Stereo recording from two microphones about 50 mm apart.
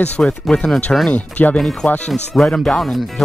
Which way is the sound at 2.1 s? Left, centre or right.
Centre.